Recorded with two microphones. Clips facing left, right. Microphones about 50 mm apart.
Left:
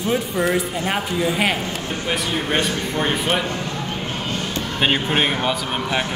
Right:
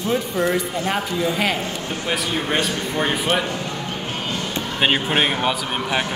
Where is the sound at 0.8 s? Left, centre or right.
Centre.